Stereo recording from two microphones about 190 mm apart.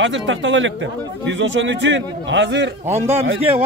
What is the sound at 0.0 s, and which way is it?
A man's voice, 80° right.